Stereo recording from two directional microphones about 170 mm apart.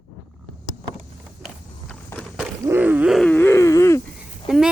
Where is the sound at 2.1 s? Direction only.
5° left (ahead or behind).